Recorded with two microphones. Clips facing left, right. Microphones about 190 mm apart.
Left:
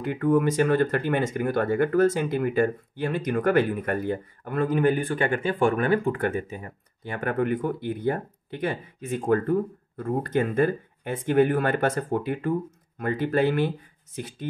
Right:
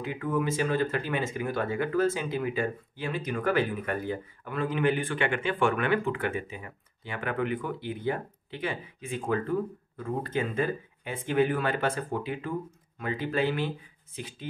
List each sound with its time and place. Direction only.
0.0 s speech: 55° left (ahead or behind)